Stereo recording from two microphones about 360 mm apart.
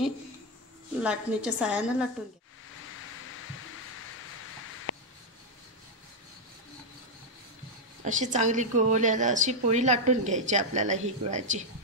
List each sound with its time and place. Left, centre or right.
1.0 s a woman's voice: centre
8.0 s a woman's voice: centre